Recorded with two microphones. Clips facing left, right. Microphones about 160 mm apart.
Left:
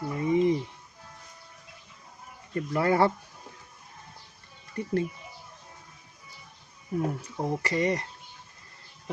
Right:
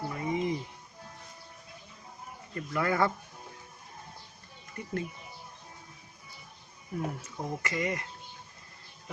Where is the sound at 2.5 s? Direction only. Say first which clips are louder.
Left 5 dB; 30° left (ahead or behind).